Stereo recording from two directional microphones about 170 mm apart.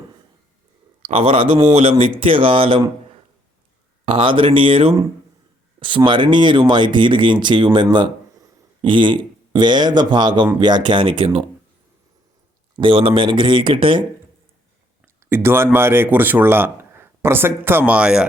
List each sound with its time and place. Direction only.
1.0 s speech: 35° right (ahead or behind)
4.0 s speech: 30° right (ahead or behind)
6.0 s speech: 30° right (ahead or behind)
12.8 s speech: 35° right (ahead or behind)
15.0 s speech: 15° right (ahead or behind)